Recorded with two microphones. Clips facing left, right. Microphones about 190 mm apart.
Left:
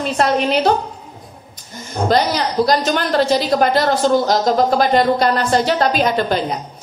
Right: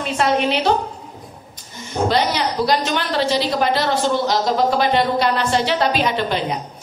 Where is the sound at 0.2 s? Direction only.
40° left (ahead or behind).